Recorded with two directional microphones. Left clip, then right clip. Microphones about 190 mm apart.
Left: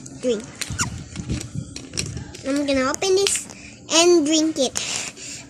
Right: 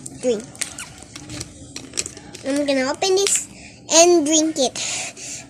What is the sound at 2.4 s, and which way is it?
A child's voice, 10° left (ahead or behind).